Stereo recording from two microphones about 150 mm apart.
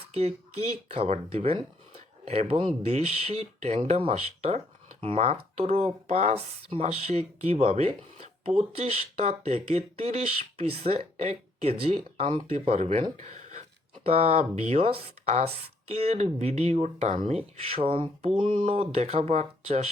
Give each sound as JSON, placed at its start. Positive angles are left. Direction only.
{"t": 0.1, "sound": "speech", "side_deg": -45}
{"t": 18.6, "sound": "speech", "side_deg": -45}